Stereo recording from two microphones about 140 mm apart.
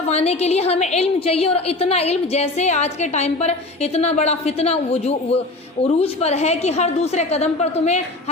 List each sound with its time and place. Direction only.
0.1 s a woman's voice: 50° left (ahead or behind)